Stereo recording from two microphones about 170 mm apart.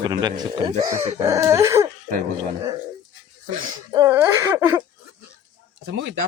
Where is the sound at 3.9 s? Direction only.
15° right (ahead or behind).